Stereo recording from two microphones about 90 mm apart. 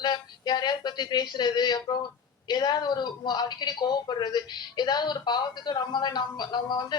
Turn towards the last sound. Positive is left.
turn(degrees=55)  # may be behind; listen again after turning